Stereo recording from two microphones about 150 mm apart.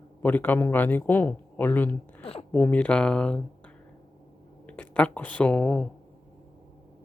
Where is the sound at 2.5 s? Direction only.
10° left (ahead or behind).